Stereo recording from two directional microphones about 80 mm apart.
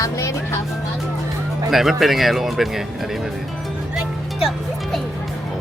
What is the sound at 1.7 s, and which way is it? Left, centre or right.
Speech, centre.